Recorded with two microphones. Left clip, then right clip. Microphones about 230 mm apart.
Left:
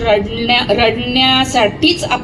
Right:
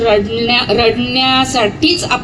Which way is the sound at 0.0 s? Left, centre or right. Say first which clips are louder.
Right 2 dB; left.